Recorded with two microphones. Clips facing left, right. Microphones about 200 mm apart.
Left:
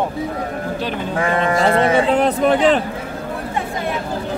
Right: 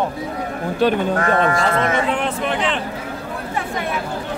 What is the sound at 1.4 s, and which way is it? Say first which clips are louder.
Speech: left 3 dB; 30° left (ahead or behind).